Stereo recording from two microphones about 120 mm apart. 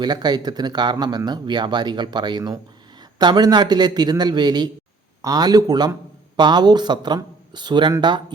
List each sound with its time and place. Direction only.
0.0 s speech: 35° right (ahead or behind)